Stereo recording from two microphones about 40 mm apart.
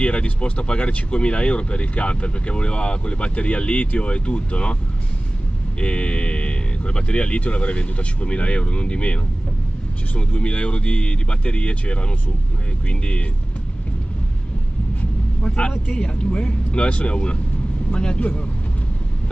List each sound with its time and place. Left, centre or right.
0.0 s speech: left
5.8 s speech: left
15.4 s speech: left
18.2 s speech: left